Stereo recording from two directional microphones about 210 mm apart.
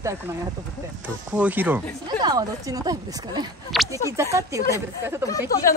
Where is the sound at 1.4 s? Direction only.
10° right (ahead or behind).